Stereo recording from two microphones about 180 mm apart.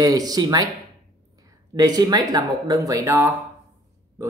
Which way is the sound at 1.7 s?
20° right (ahead or behind).